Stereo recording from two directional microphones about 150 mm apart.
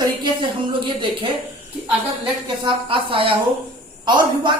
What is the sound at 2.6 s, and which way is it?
Speech, 35° right (ahead or behind).